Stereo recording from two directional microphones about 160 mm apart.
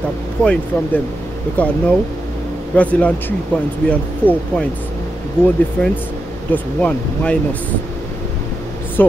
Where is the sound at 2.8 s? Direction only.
10° left (ahead or behind).